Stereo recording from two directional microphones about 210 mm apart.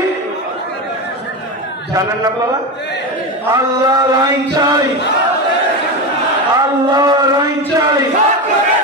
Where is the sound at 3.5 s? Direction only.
15° right (ahead or behind).